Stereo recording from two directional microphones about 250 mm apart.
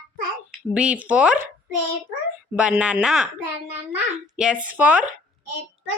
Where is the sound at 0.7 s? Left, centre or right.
Centre.